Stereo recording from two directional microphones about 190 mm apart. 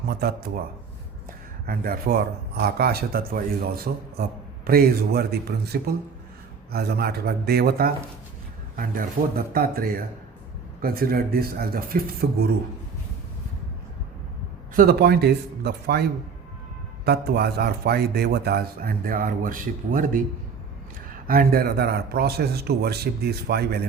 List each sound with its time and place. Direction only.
0.1 s a man's voice: 55° right (ahead or behind)
1.6 s a man's voice: 50° right (ahead or behind)
14.8 s a man's voice: 55° right (ahead or behind)
17.1 s a man's voice: 55° right (ahead or behind)
21.2 s a man's voice: 50° right (ahead or behind)